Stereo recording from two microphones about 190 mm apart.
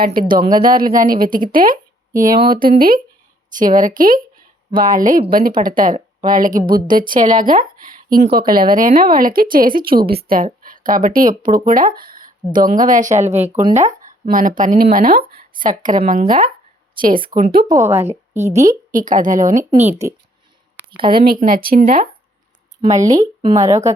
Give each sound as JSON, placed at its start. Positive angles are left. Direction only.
{"t": 0.0, "sound": "speech", "side_deg": -50}
{"t": 6.6, "sound": "speech", "side_deg": -20}
{"t": 6.8, "sound": "a woman's voice", "side_deg": -45}
{"t": 17.6, "sound": "speech", "side_deg": -15}
{"t": 18.5, "sound": "speech", "side_deg": -45}
{"t": 20.9, "sound": "speech", "side_deg": -25}
{"t": 21.2, "sound": "speech", "side_deg": -50}
{"t": 22.9, "sound": "speech", "side_deg": -20}